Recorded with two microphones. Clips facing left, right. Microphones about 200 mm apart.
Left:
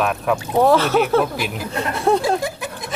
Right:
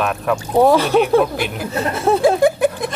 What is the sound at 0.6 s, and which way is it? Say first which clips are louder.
Speech: right 2 dB; 15° right (ahead or behind).